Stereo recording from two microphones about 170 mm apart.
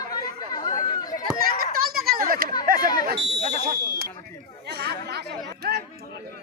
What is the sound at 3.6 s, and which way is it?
Speech, 60° right (ahead or behind).